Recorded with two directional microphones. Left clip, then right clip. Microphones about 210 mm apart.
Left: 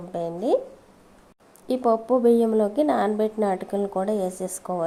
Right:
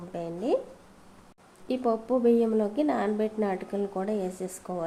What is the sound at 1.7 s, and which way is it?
A woman's voice, 15° left (ahead or behind).